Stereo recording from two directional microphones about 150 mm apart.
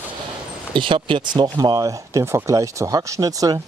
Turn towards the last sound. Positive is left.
turn(degrees=-25)  # may be behind; listen again after turning